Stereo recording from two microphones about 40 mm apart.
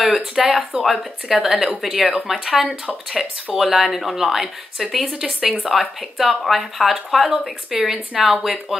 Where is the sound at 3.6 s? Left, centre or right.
Centre.